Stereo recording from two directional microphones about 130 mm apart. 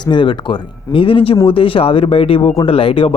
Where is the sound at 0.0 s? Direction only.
40° left (ahead or behind).